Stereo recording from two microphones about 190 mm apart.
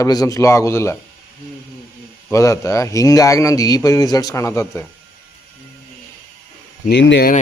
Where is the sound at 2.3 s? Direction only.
15° left (ahead or behind).